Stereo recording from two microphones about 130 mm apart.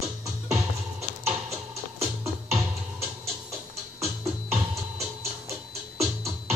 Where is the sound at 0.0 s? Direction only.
25° right (ahead or behind).